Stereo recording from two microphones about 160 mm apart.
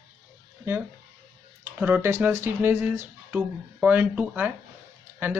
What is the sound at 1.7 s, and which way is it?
A man's voice, 15° right (ahead or behind).